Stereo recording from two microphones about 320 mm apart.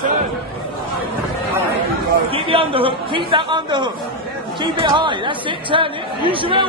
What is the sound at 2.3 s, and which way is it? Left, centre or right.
A woman's voice, centre.